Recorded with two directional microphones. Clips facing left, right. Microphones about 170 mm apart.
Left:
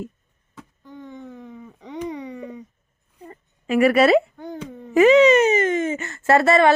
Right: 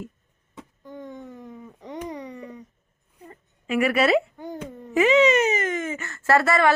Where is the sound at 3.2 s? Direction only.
40° left (ahead or behind).